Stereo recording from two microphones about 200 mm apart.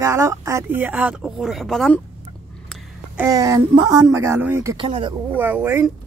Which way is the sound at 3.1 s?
15° right (ahead or behind).